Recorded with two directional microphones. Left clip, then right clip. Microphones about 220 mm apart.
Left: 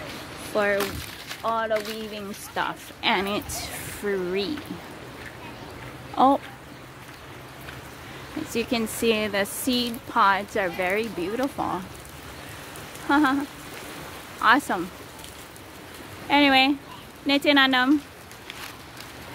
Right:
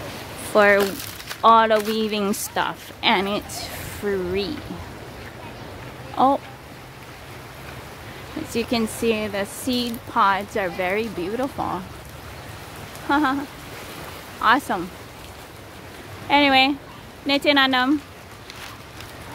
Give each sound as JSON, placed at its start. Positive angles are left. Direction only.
{"t": 0.5, "sound": "speech", "side_deg": -25}
{"t": 1.4, "sound": "speech", "side_deg": -35}
{"t": 2.5, "sound": "speech", "side_deg": -10}
{"t": 6.1, "sound": "speech", "side_deg": 0}
{"t": 8.5, "sound": "speech", "side_deg": 0}
{"t": 13.1, "sound": "speech", "side_deg": 0}
{"t": 14.4, "sound": "speech", "side_deg": 0}
{"t": 16.3, "sound": "speech", "side_deg": -5}